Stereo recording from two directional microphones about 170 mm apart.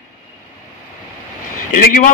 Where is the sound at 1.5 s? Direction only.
50° left (ahead or behind).